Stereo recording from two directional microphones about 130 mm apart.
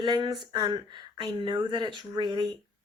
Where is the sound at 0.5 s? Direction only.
40° right (ahead or behind).